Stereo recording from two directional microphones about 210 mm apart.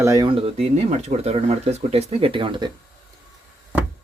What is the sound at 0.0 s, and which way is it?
Speech, 15° right (ahead or behind).